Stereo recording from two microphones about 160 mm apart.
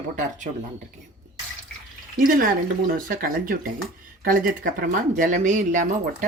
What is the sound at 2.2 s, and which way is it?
A woman's voice, 60° right (ahead or behind).